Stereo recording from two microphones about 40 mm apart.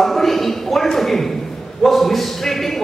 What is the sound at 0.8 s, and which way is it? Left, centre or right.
A man's voice, centre.